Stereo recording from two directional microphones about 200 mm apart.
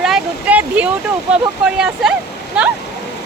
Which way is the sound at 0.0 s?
5° right (ahead or behind).